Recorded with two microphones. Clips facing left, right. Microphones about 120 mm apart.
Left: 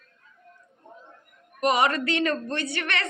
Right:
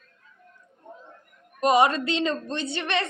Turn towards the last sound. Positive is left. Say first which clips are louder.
# right 2 dB
turn(degrees=-20)  # may be behind; listen again after turning